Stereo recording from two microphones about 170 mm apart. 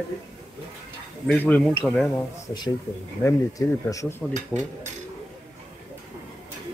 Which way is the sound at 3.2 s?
20° left (ahead or behind).